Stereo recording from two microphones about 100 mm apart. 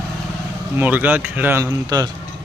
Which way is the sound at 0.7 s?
20° right (ahead or behind).